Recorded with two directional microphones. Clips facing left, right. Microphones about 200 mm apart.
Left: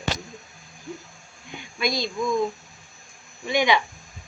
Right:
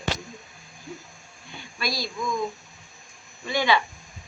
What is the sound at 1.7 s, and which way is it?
Speech, 20° left (ahead or behind).